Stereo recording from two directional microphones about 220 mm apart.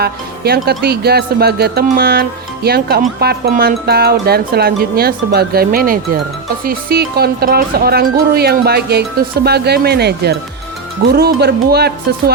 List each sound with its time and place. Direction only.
0.0 s speech: 45° right (ahead or behind)